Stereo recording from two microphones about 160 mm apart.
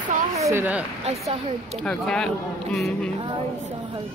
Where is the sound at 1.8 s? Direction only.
5° left (ahead or behind).